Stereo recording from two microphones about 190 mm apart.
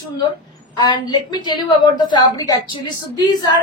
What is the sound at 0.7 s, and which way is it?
A woman's voice, 25° left (ahead or behind).